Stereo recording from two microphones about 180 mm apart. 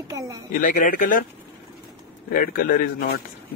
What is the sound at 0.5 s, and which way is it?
Speech, 50° left (ahead or behind).